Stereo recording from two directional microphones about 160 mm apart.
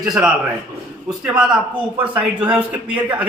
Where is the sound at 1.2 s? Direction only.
5° right (ahead or behind).